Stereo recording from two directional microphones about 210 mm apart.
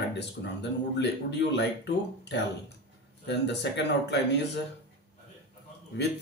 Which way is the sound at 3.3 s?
55° left (ahead or behind).